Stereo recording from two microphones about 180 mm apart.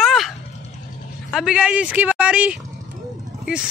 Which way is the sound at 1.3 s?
5° right (ahead or behind).